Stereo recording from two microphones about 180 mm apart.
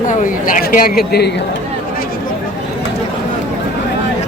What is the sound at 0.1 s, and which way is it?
Speech, 50° left (ahead or behind).